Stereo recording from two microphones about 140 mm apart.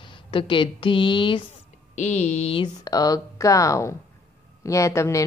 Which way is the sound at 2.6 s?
25° left (ahead or behind).